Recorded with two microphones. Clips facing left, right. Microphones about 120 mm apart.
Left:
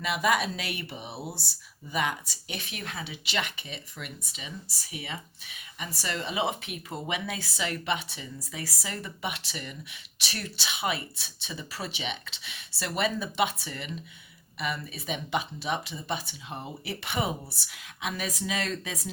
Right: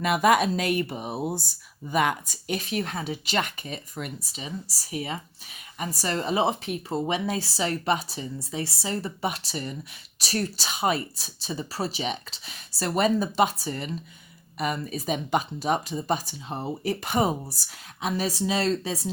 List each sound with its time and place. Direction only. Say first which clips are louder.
0.0 s speech: right 6 dB; 50° right (ahead or behind); by 19.0 s 30° right (ahead or behind)